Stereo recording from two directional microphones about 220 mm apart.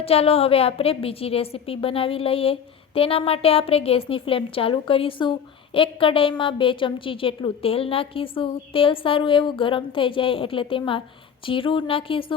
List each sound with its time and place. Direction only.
0.0 s a woman's voice: 25° left (ahead or behind)